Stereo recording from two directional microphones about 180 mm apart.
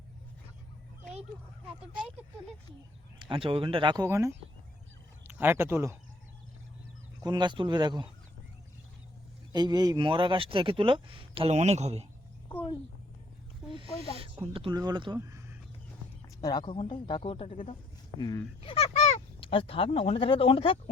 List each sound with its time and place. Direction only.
3.2 s speech: 30° right (ahead or behind)
7.2 s speech: 25° right (ahead or behind)
9.5 s speech: 20° right (ahead or behind); by 12.0 s 35° right (ahead or behind)
14.4 s speech: 30° right (ahead or behind)
16.4 s speech: 25° left (ahead or behind)
18.2 s speech: 20° left (ahead or behind)
18.7 s speech: 35° left (ahead or behind)